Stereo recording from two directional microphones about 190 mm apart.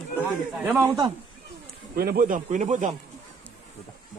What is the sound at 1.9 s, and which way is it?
Speech, 50° right (ahead or behind).